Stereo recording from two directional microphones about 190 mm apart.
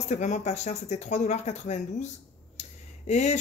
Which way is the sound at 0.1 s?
35° left (ahead or behind).